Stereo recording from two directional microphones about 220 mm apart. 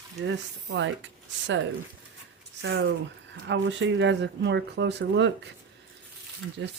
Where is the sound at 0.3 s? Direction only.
55° right (ahead or behind).